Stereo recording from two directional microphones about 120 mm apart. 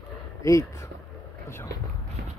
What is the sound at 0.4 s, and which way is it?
Speech, 25° left (ahead or behind).